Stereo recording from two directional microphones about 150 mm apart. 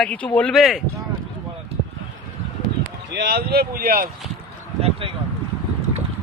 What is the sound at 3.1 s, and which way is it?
Speech, 90° right.